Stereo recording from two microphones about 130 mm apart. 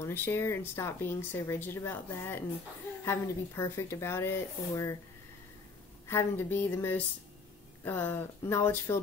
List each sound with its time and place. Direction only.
0.0 s speech: 20° left (ahead or behind)
6.0 s speech: 20° left (ahead or behind)